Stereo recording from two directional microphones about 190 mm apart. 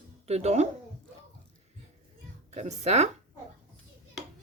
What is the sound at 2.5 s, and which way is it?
Speech, 35° right (ahead or behind).